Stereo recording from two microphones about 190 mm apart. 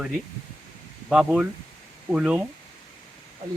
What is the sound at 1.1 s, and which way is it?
Speech, 5° right (ahead or behind).